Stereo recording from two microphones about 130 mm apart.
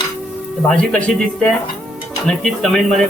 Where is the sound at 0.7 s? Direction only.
5° left (ahead or behind).